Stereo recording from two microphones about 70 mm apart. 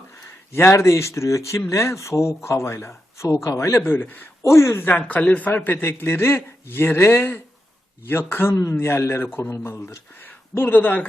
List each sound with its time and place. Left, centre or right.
0.5 s a man's voice: left
4.4 s speech: left
4.9 s a man's voice: left
5.8 s speech: left